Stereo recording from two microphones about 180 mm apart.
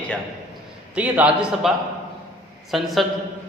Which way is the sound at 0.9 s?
5° right (ahead or behind).